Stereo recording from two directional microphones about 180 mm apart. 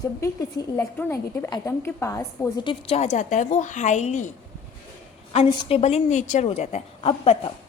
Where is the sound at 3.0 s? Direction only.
40° left (ahead or behind).